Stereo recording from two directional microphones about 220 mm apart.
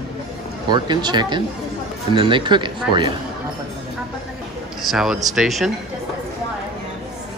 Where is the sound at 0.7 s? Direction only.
20° right (ahead or behind).